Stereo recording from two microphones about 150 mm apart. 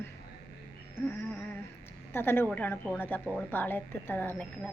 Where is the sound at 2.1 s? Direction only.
15° left (ahead or behind).